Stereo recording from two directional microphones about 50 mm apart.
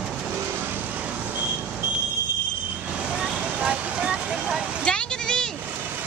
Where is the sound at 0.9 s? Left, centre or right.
Right.